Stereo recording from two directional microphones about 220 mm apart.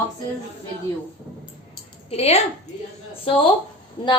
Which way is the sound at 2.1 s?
30° left (ahead or behind).